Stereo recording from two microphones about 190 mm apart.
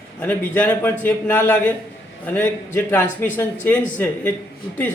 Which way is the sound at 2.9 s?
10° left (ahead or behind).